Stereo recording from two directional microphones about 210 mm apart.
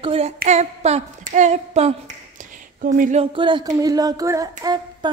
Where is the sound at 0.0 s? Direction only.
30° right (ahead or behind).